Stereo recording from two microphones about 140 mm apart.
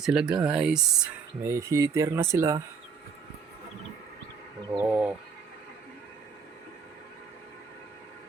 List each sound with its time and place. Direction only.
0.0 s speech: 5° right (ahead or behind)
1.5 s speech: 20° right (ahead or behind)
4.8 s speech: 10° right (ahead or behind)